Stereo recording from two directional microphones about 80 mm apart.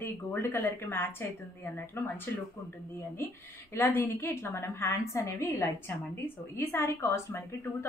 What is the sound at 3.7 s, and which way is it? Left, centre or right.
A woman's voice, left.